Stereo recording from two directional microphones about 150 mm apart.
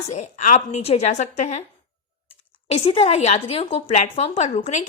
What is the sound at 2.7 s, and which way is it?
A woman's voice, 40° left (ahead or behind).